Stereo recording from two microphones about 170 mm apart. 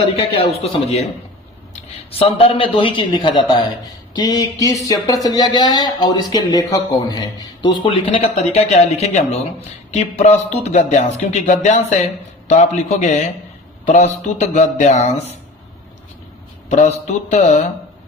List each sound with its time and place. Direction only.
0.6 s speech: 35° left (ahead or behind)
9.9 s music: 40° left (ahead or behind)
13.8 s speech: 40° left (ahead or behind)
16.6 s a man's voice: 45° left (ahead or behind)
17.3 s music: 45° left (ahead or behind)